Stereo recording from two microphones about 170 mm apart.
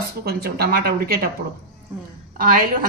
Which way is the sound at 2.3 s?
55° right (ahead or behind).